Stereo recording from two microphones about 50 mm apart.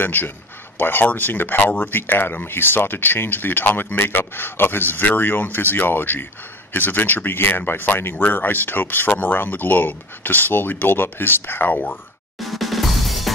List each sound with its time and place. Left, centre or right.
0.0 s speech: left
12.4 s music: centre